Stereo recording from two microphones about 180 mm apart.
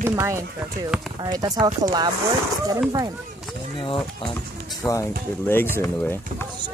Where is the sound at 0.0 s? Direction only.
15° right (ahead or behind).